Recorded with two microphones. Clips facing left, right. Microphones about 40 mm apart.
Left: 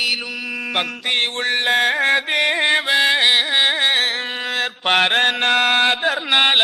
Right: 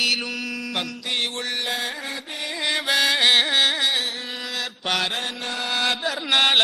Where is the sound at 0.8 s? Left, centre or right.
Left.